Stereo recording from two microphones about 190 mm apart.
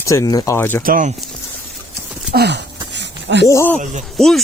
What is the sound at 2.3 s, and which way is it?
Speech, 60° right (ahead or behind).